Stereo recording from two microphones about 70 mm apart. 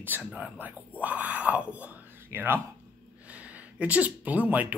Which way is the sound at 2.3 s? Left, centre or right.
Right.